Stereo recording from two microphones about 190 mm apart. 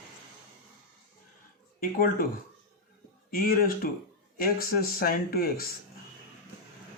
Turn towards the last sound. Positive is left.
turn(degrees=50)  # may be behind; listen again after turning